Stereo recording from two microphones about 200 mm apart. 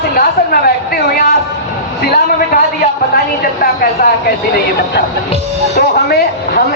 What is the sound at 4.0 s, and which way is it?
Speech, 50° left (ahead or behind).